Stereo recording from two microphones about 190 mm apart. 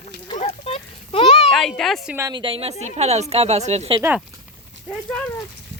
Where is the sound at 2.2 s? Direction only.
20° right (ahead or behind).